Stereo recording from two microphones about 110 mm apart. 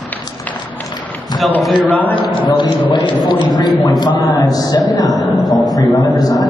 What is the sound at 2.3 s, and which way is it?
A man's voice, 45° left (ahead or behind).